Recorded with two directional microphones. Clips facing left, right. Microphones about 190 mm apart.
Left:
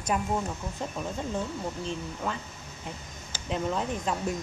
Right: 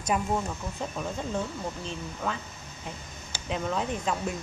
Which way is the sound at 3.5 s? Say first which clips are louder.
Even; centre (ahead or behind).